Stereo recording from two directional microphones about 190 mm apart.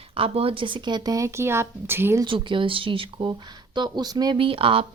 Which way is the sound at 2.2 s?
25° right (ahead or behind).